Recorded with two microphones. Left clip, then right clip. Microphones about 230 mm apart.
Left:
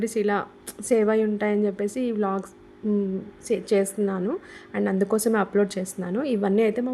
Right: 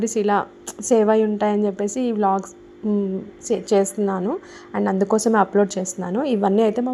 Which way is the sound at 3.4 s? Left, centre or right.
Centre.